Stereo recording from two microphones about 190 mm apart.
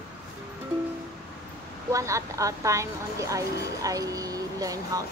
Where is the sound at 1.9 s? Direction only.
15° right (ahead or behind).